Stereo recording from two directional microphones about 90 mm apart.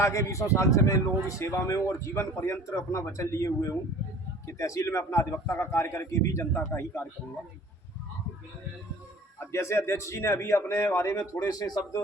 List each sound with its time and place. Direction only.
0.0 s speech: 35° left (ahead or behind)
9.5 s speech: 30° left (ahead or behind); by 12.0 s 50° left (ahead or behind)